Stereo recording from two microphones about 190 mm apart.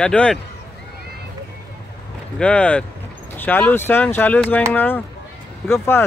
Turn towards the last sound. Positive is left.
turn(degrees=10)  # may be behind; listen again after turning